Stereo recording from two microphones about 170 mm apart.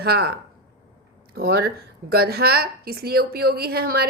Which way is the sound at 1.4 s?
70° right (ahead or behind).